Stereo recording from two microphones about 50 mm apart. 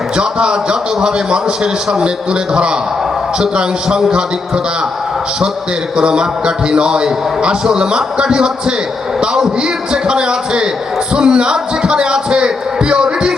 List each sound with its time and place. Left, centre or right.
0.2 s a man's voice: centre
6.0 s a man's voice: centre